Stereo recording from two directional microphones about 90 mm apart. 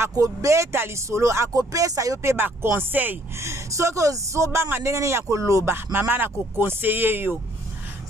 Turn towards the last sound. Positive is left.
turn(degrees=-25)  # may be behind; listen again after turning